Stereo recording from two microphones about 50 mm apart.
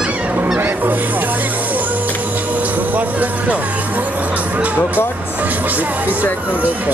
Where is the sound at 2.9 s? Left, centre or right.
Right.